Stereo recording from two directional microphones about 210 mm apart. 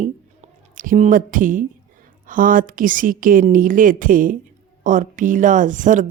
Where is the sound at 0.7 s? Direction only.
40° right (ahead or behind).